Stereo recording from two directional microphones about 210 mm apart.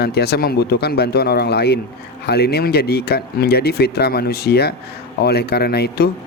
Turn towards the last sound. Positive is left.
turn(degrees=50)  # may be behind; listen again after turning